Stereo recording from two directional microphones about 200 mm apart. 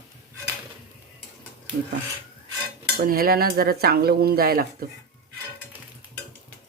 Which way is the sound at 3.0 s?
50° right (ahead or behind).